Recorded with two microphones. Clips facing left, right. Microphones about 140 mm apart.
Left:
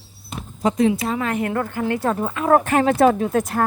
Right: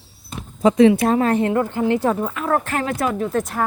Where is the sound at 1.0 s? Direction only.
40° right (ahead or behind).